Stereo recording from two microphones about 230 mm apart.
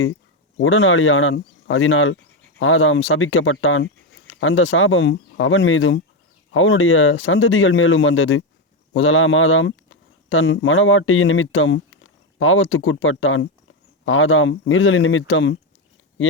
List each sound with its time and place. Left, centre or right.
0.5 s speech: left